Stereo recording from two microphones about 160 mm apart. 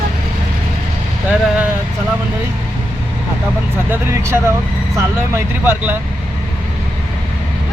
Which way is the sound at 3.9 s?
15° right (ahead or behind).